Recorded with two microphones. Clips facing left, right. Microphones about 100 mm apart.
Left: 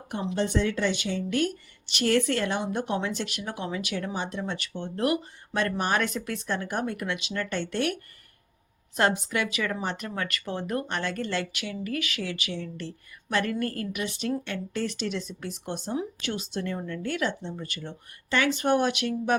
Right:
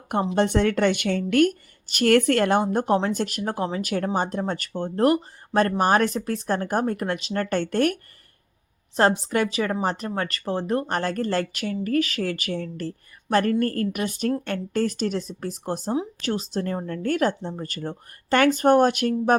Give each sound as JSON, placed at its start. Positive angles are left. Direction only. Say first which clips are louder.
{"t": 0.1, "sound": "a woman's voice", "louder": "right 6 dB", "side_deg": -60}
{"t": 9.0, "sound": "a woman's voice", "louder": "right 5 dB", "side_deg": -35}